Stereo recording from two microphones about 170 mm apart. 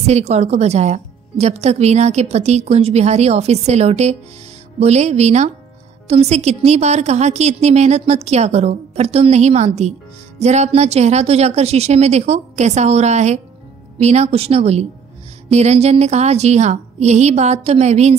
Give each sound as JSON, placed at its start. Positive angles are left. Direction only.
{"t": 0.0, "sound": "a woman's voice", "side_deg": -40}